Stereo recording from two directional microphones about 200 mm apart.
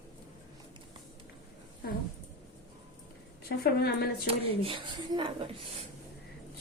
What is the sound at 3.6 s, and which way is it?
Speech, 55° left (ahead or behind).